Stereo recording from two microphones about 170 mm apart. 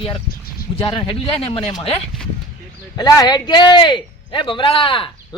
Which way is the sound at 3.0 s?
25° left (ahead or behind).